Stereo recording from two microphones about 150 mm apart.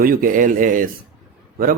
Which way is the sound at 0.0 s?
70° right (ahead or behind).